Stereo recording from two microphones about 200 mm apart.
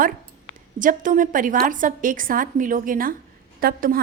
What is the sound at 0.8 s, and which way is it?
A woman's voice, 40° right (ahead or behind).